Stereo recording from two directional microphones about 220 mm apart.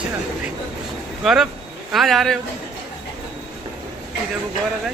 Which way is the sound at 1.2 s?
Centre (ahead or behind).